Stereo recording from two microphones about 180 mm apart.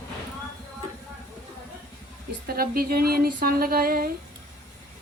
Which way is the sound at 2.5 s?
55° right (ahead or behind).